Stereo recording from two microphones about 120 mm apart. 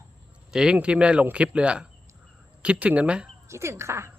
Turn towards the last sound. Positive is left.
turn(degrees=-20)  # may be behind; listen again after turning